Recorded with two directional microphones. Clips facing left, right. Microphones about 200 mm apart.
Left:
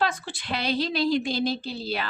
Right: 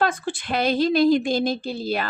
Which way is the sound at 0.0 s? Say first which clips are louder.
Right 4 dB; 50° right (ahead or behind).